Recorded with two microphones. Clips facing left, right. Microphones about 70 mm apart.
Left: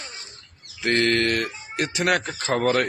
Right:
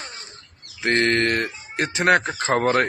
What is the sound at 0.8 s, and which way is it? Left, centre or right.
A child's voice, right.